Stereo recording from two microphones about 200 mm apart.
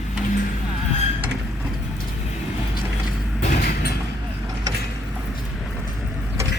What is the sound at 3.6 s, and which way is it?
Mechanisms, 55° left (ahead or behind).